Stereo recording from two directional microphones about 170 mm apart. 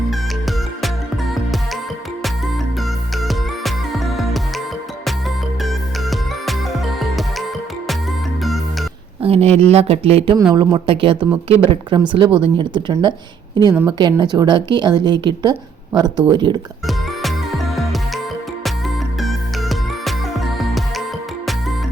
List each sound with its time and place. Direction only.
3.2 s music: centre (ahead or behind)
5.6 s music: centre (ahead or behind)
9.2 s a woman's voice: 35° right (ahead or behind)
19.2 s music: centre (ahead or behind)